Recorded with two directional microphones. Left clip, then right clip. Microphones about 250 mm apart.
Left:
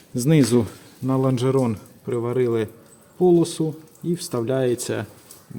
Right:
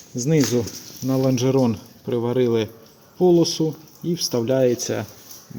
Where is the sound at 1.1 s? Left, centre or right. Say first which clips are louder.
Right 1 dB; centre.